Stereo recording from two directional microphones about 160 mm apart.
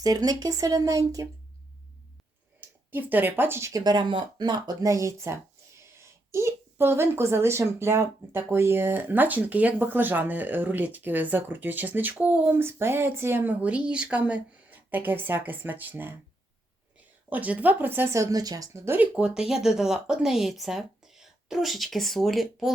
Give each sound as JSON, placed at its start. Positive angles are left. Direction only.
{"t": 0.0, "sound": "speech", "side_deg": -25}
{"t": 2.6, "sound": "speech", "side_deg": -10}
{"t": 17.2, "sound": "speech", "side_deg": -10}